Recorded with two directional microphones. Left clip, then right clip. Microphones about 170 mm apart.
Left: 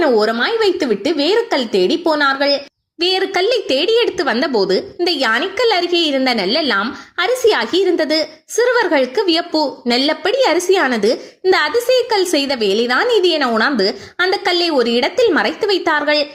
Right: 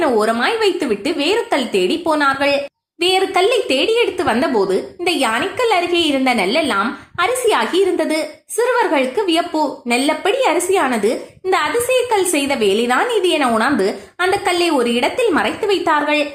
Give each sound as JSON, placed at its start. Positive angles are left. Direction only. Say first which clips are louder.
{"t": 0.0, "sound": "a woman's voice", "louder": "left 1 dB", "side_deg": 30}